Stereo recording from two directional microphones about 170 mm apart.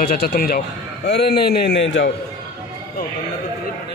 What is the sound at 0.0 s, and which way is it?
Speech, 60° left (ahead or behind).